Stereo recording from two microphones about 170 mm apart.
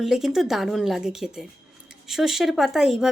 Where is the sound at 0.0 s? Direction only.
Centre (ahead or behind).